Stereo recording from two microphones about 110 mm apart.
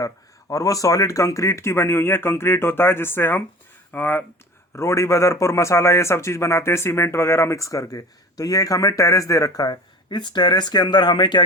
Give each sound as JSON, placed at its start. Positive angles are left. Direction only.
{"t": 0.0, "sound": "a man's voice", "side_deg": 30}